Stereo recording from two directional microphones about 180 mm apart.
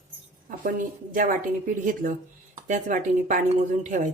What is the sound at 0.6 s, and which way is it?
Speech, 50° right (ahead or behind).